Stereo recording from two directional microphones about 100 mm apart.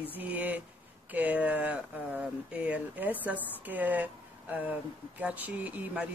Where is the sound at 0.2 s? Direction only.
15° right (ahead or behind).